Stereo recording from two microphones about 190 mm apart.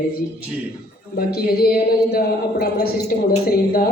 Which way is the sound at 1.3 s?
55° left (ahead or behind).